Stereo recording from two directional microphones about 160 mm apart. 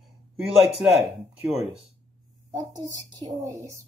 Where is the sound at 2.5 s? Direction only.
25° right (ahead or behind).